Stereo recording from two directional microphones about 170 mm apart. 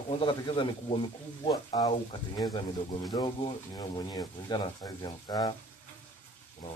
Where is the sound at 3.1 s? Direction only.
30° left (ahead or behind).